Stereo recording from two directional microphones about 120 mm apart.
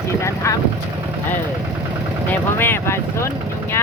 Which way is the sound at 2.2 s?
20° left (ahead or behind).